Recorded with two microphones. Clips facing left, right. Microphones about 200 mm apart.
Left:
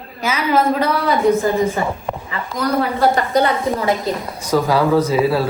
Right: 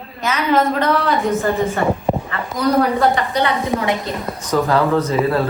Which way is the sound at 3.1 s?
45° left (ahead or behind).